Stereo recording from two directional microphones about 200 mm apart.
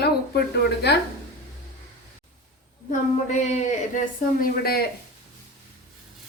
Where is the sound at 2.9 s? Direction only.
35° left (ahead or behind); by 4.9 s 50° left (ahead or behind).